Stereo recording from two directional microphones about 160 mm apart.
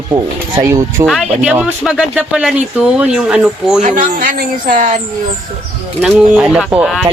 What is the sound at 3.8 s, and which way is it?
Speech, 55° right (ahead or behind).